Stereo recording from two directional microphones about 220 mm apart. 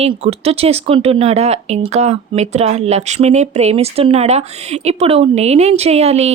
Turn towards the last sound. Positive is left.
turn(degrees=-30)  # may be behind; listen again after turning